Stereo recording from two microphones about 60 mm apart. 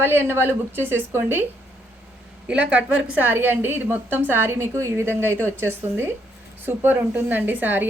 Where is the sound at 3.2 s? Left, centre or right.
Right.